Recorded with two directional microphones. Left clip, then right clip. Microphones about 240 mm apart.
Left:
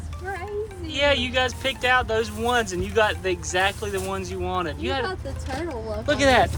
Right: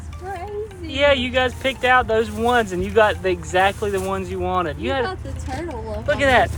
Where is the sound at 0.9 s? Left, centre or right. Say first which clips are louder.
Right 4 dB; centre.